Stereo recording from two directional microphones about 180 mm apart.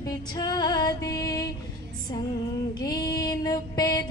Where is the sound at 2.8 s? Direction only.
20° left (ahead or behind).